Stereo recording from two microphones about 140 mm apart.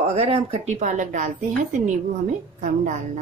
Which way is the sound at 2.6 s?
60° right (ahead or behind).